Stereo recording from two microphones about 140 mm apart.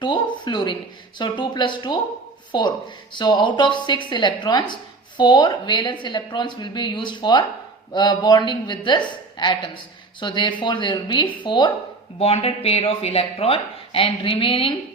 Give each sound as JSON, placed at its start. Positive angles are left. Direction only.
{"t": 0.0, "sound": "a sound", "side_deg": 35}
{"t": 1.2, "sound": "a woman's voice", "side_deg": 35}
{"t": 12.2, "sound": "speech", "side_deg": 45}